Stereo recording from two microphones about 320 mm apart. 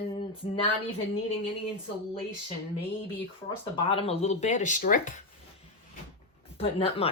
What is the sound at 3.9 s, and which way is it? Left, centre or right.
Speech, centre.